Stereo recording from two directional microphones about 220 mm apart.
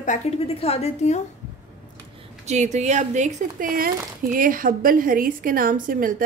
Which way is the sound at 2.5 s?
30° right (ahead or behind).